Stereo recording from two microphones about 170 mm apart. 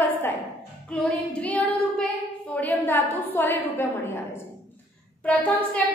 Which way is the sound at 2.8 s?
10° left (ahead or behind).